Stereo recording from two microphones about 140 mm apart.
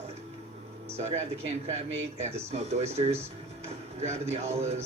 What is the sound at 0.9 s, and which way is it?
Speech, 50° right (ahead or behind).